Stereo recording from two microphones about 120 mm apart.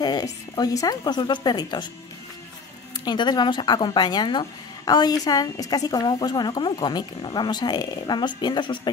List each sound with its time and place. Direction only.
0.0 s a woman's voice: 35° left (ahead or behind)
3.1 s a woman's voice: 35° left (ahead or behind)